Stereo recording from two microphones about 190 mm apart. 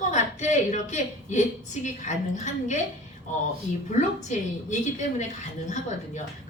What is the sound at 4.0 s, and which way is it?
A woman's voice, 40° left (ahead or behind).